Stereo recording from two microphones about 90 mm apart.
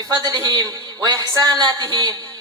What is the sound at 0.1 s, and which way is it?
A man's voice, 40° right (ahead or behind).